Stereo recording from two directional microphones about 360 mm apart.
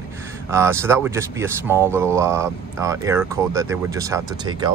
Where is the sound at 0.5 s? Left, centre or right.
Centre.